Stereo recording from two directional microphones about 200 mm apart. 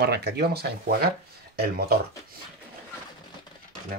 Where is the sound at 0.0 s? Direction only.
55° right (ahead or behind).